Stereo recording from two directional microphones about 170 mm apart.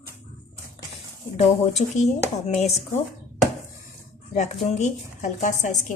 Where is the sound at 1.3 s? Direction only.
40° left (ahead or behind).